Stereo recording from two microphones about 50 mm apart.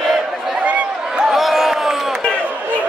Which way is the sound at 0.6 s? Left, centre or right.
Right.